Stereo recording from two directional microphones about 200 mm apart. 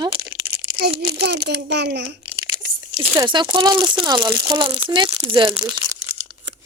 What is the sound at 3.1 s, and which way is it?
Speech, 20° right (ahead or behind).